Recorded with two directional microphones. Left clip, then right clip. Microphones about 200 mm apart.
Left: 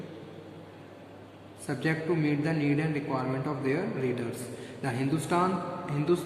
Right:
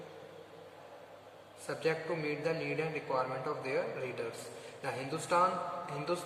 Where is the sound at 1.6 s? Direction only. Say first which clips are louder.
Left 4 dB; 20° left (ahead or behind).